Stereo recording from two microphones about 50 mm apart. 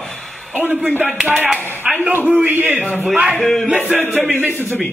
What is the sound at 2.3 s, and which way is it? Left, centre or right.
Speech, right.